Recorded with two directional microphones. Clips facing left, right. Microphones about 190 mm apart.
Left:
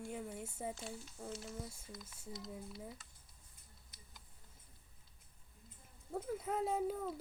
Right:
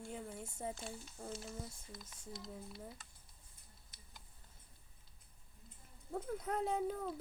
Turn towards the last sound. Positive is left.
turn(degrees=5)  # may be behind; listen again after turning